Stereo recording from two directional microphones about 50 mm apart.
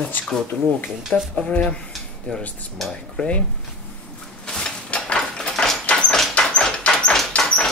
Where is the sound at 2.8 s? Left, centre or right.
Centre.